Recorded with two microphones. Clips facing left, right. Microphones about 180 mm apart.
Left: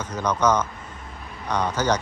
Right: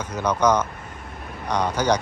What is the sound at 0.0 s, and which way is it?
Speech, 10° right (ahead or behind).